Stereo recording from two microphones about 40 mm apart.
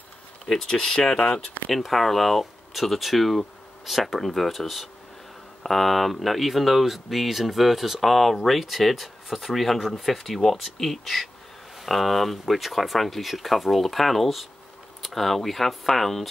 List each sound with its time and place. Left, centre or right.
0.5 s speech: centre
1.7 s speech: centre